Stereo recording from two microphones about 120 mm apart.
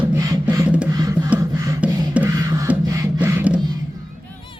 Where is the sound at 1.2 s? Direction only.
10° right (ahead or behind).